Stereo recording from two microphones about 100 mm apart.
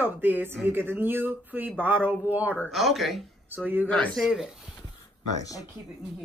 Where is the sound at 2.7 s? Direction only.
Centre (ahead or behind).